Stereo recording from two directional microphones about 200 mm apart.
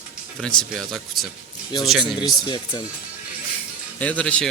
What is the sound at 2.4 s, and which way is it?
Speech, 25° left (ahead or behind).